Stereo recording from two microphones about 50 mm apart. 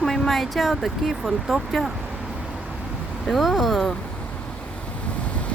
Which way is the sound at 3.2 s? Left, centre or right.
Centre.